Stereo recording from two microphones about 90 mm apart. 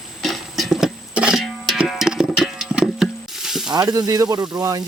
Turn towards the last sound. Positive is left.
turn(degrees=-45)  # may be behind; listen again after turning